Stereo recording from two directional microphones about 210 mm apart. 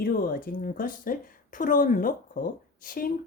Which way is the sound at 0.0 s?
40° left (ahead or behind).